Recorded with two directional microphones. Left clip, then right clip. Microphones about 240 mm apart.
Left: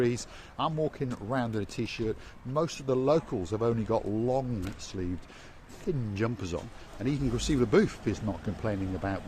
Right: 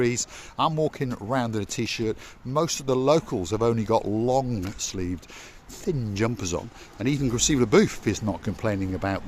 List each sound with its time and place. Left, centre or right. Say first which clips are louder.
0.0 s speech: right 4 dB; right